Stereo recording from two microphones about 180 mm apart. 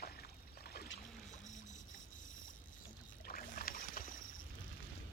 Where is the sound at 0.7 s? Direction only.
60° left (ahead or behind).